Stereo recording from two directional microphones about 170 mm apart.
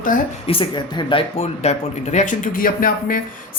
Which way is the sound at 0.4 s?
30° left (ahead or behind).